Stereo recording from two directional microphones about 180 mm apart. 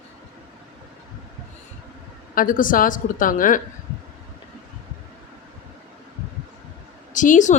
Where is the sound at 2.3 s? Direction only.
50° left (ahead or behind).